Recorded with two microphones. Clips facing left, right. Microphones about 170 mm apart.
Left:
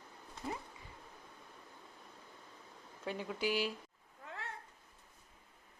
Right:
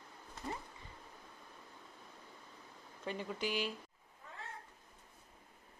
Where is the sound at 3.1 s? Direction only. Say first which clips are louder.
Left 2 dB; 5° left (ahead or behind).